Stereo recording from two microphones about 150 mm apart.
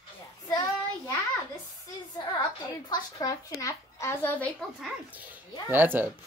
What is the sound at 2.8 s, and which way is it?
A woman's voice, 25° left (ahead or behind).